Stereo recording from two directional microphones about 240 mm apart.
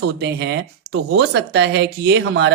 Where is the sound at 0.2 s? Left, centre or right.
Right.